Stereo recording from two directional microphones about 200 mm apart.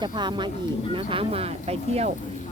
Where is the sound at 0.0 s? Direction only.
20° right (ahead or behind).